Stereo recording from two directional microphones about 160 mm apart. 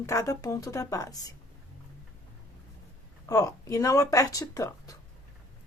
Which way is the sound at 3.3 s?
20° left (ahead or behind).